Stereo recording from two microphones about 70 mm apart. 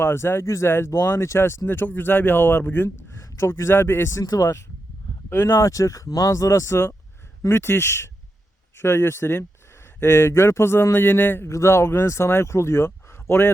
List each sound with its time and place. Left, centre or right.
0.0 s speech: left
11.4 s speech: left